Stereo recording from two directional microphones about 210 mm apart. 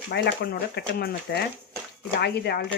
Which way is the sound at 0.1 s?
50° left (ahead or behind).